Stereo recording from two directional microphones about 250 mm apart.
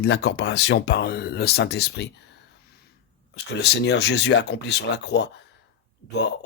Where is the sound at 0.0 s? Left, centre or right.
Left.